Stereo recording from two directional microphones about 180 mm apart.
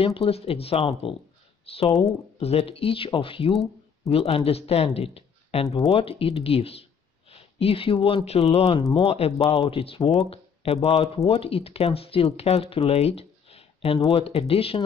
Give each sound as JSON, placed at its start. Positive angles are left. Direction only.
{"t": 0.0, "sound": "speech", "side_deg": 35}
{"t": 2.3, "sound": "speech", "side_deg": 35}